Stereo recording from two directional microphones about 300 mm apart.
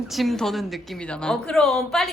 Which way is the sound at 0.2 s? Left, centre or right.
Centre.